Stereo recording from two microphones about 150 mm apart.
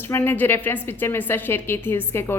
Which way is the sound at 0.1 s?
15° left (ahead or behind).